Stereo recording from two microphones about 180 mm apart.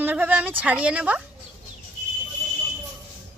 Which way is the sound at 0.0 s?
10° right (ahead or behind).